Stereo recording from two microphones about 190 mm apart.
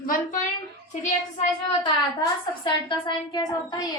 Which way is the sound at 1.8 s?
25° left (ahead or behind).